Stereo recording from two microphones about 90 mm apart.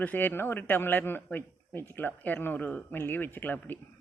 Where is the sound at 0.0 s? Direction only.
20° left (ahead or behind).